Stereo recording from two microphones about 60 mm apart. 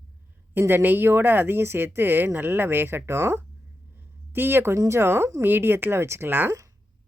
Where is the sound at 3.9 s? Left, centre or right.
Right.